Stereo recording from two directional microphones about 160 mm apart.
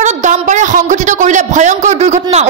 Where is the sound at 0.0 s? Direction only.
50° right (ahead or behind).